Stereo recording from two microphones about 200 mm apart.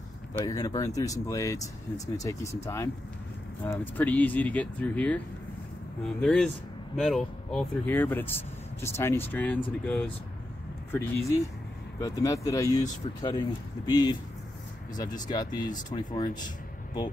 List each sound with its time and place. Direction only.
0.3 s speech: 15° left (ahead or behind)
6.2 s speech: centre (ahead or behind)
10.9 s speech: 10° left (ahead or behind)